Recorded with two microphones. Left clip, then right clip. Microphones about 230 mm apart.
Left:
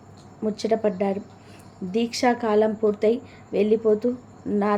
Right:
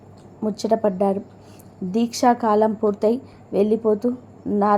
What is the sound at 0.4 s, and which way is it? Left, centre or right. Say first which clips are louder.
A woman's voice: right 3 dB; centre.